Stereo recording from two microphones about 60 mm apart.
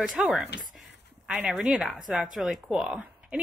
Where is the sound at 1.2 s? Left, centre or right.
Centre.